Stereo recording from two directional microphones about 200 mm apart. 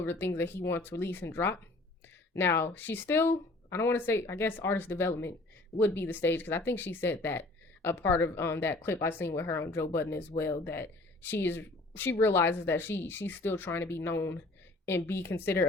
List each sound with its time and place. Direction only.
0.0 s speech: 10° left (ahead or behind)